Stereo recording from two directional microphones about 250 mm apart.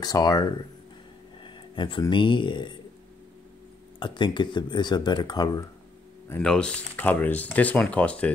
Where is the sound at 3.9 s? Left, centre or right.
Centre.